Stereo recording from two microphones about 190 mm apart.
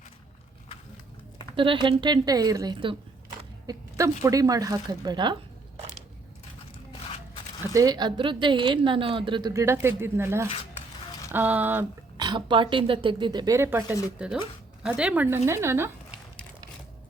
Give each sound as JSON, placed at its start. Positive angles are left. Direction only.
{"t": 1.5, "sound": "a woman's voice", "side_deg": -25}
{"t": 7.7, "sound": "a woman's voice", "side_deg": -20}
{"t": 12.1, "sound": "a woman's voice", "side_deg": -25}